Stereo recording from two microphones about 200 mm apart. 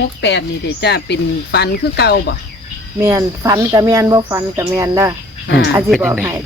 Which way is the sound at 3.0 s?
15° right (ahead or behind).